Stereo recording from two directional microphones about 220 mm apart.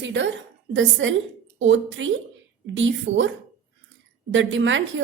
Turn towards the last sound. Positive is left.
turn(degrees=-60)  # may be behind; listen again after turning